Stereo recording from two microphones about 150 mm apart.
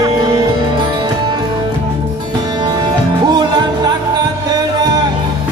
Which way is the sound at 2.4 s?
30° right (ahead or behind).